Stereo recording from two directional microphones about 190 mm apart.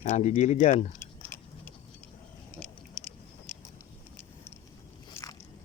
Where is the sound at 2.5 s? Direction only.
5° left (ahead or behind).